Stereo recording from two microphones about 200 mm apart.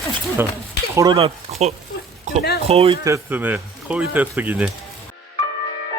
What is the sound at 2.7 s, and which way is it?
Speech, 30° right (ahead or behind).